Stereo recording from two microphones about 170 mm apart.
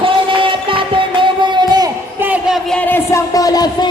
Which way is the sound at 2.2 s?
10° right (ahead or behind).